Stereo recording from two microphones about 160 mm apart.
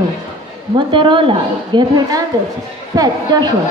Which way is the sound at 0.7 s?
30° right (ahead or behind).